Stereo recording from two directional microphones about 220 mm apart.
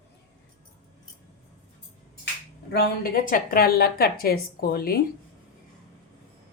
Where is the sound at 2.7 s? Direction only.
45° left (ahead or behind).